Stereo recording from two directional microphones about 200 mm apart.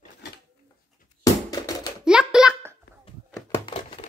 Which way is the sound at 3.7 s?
25° left (ahead or behind).